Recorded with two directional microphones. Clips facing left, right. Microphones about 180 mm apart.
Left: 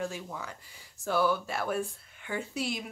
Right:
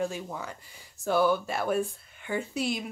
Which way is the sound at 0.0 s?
20° right (ahead or behind).